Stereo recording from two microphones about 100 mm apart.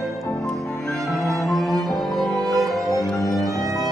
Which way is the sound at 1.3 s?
Centre (ahead or behind).